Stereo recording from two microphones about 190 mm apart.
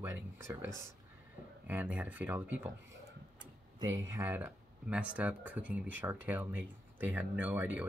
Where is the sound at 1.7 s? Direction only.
10° right (ahead or behind).